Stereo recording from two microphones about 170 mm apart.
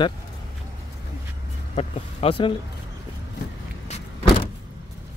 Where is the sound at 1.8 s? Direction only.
35° left (ahead or behind).